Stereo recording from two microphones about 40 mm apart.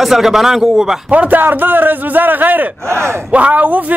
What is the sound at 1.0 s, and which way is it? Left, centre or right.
Speech, right.